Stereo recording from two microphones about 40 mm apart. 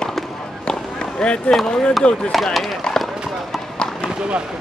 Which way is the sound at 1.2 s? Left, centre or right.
Centre.